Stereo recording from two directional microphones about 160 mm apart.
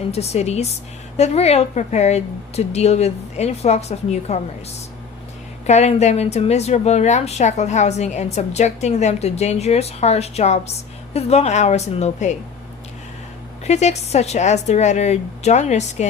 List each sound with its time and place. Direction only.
0.1 s a woman's voice: 40° left (ahead or behind)
5.6 s a woman's voice: 45° left (ahead or behind)
13.7 s a woman's voice: 45° left (ahead or behind)